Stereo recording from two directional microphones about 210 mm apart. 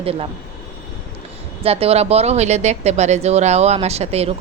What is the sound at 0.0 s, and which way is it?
Speech, 25° right (ahead or behind).